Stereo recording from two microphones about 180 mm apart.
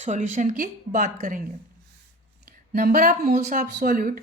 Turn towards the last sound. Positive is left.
turn(degrees=-50)  # may be behind; listen again after turning